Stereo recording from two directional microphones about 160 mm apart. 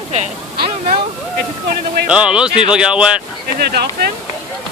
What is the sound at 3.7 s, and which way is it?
Speech, 80° right.